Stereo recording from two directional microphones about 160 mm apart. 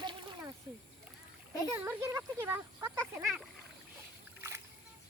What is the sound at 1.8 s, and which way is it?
Speech, 15° right (ahead or behind).